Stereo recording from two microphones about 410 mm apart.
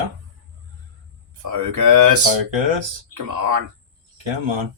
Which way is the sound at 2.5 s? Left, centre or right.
Right.